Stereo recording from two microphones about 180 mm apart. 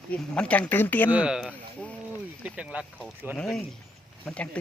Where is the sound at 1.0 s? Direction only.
5° right (ahead or behind).